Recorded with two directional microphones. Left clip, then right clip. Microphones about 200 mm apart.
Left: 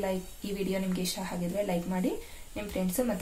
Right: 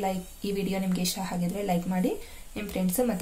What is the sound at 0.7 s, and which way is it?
Speech, 45° right (ahead or behind).